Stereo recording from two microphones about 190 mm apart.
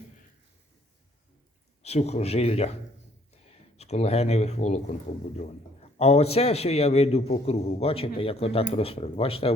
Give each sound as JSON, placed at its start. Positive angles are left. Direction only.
{"t": 1.8, "sound": "speech", "side_deg": 35}